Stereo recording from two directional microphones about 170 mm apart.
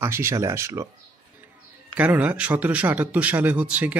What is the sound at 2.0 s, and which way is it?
A man's voice, 10° right (ahead or behind).